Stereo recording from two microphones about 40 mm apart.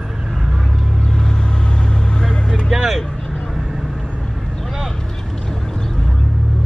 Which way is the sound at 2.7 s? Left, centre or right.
Centre.